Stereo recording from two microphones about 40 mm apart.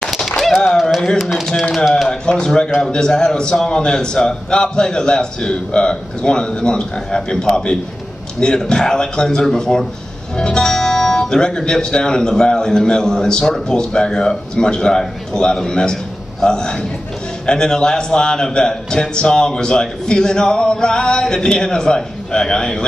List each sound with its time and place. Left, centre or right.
1.2 s speech: centre
2.0 s a man's voice: left